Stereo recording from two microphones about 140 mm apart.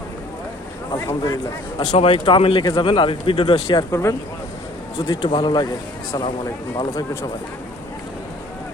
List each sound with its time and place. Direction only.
0.9 s speech: 20° left (ahead or behind)
1.8 s speech: 45° left (ahead or behind)
4.9 s speech: 40° left (ahead or behind); by 7.3 s 20° left (ahead or behind)